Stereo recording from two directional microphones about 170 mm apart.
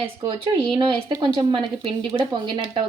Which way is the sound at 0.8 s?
25° right (ahead or behind).